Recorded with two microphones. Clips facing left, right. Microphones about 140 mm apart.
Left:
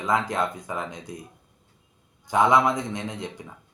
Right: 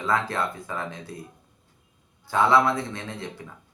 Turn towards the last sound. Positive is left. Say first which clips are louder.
# left 2 dB
turn(degrees=20)  # may be behind; listen again after turning